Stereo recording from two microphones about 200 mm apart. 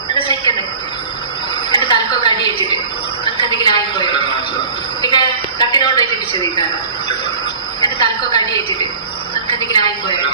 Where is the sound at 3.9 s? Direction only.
25° left (ahead or behind).